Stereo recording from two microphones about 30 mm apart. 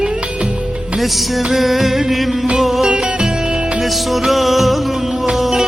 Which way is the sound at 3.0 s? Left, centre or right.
Right.